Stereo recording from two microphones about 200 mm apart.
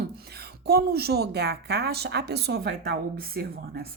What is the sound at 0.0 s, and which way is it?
Speech, 50° right (ahead or behind).